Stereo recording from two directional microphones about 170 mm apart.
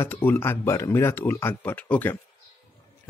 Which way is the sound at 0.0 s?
10° left (ahead or behind).